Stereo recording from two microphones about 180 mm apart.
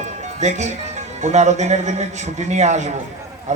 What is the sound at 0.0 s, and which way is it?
Music, 40° right (ahead or behind).